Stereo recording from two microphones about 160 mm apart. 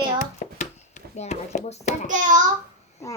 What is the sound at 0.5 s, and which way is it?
A child's voice, 45° left (ahead or behind).